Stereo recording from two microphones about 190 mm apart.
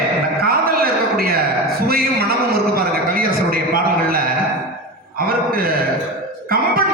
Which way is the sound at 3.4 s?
50° right (ahead or behind).